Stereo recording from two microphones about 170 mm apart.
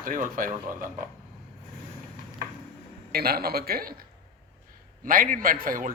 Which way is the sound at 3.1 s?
65° right (ahead or behind).